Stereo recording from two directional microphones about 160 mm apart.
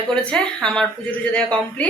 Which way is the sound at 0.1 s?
5° left (ahead or behind).